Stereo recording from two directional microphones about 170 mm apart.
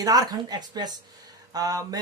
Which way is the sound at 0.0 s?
20° right (ahead or behind).